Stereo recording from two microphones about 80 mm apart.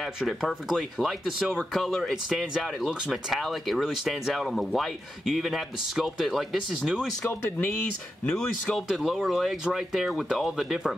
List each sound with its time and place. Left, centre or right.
0.2 s speech: centre
7.2 s speech: left
8.4 s speech: centre
8.8 s speech: centre